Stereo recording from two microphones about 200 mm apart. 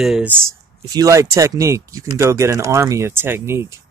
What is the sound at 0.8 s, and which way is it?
Speech, 15° right (ahead or behind).